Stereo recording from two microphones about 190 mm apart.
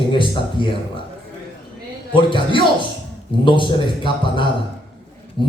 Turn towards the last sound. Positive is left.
turn(degrees=25)  # may be behind; listen again after turning